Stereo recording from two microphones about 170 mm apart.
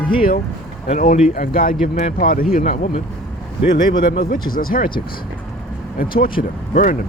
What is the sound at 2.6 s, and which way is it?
Speech, 40° left (ahead or behind).